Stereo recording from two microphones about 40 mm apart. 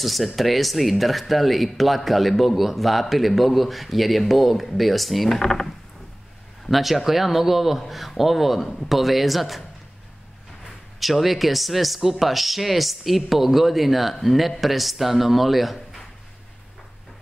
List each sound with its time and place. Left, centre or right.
0.0 s speech: centre
5.4 s speech: centre
6.7 s speech: centre
11.0 s speech: centre